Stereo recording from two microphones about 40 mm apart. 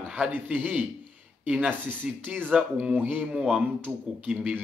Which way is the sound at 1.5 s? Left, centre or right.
Right.